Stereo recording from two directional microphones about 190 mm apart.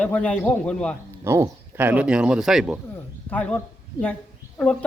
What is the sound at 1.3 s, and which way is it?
Speech, 15° right (ahead or behind).